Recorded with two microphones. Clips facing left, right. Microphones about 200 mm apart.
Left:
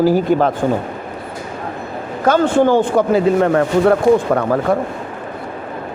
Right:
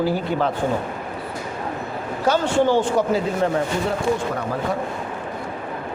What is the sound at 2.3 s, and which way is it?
A man's voice, 55° left (ahead or behind).